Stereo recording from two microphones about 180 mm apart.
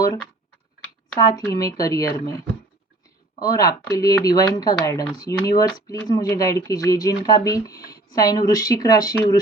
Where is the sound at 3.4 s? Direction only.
20° left (ahead or behind).